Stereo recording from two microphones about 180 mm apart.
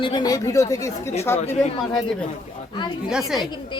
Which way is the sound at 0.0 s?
25° left (ahead or behind).